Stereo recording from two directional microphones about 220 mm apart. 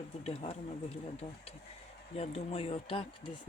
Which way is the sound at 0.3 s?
30° left (ahead or behind).